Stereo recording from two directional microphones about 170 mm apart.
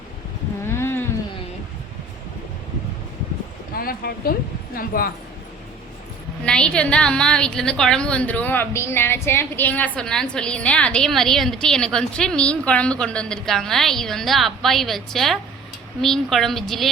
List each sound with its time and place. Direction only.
0.6 s a sound: 15° left (ahead or behind)
3.8 s speech: 60° left (ahead or behind)
6.4 s a woman's voice: 5° left (ahead or behind)